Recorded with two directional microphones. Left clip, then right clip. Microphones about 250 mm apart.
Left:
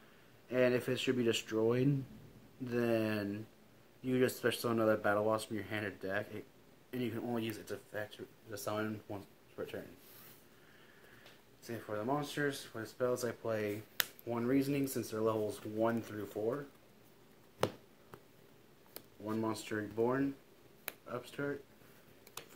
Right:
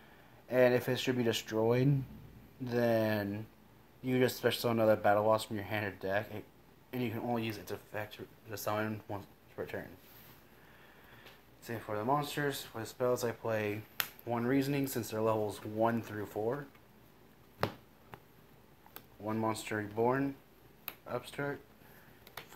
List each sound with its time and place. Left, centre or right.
0.5 s speech: centre
11.6 s speech: centre
19.2 s speech: centre